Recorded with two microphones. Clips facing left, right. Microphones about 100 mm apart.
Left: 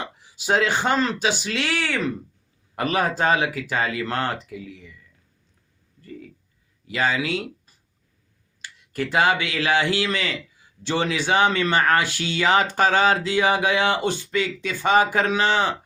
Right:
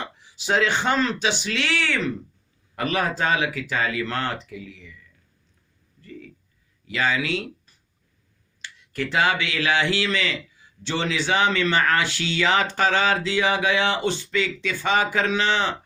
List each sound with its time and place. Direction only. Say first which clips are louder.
0.2 s a man's voice: left 1 dB; 45° left (ahead or behind)
6.0 s a sound: left 2 dB; 35° left (ahead or behind)
6.8 s a man's voice: left 1 dB; 35° left (ahead or behind)
9.1 s speech: left 2 dB; 35° left (ahead or behind)